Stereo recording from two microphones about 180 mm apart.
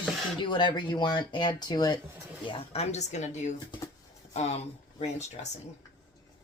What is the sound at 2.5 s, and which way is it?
Speech, 35° left (ahead or behind).